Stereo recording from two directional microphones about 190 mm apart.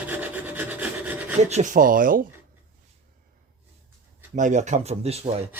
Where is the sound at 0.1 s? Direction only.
10° right (ahead or behind).